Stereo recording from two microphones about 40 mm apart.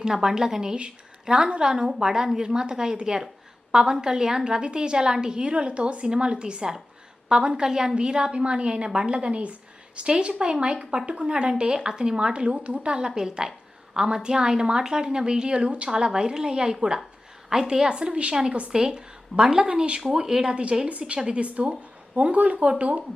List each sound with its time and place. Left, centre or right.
0.0 s a woman's voice: centre; by 18.7 s right
18.7 s a woman's voice: centre